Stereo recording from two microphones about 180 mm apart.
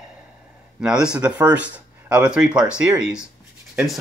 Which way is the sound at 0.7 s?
5° right (ahead or behind).